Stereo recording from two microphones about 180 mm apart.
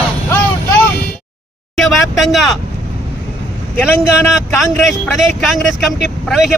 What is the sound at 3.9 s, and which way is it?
Speech, 15° left (ahead or behind).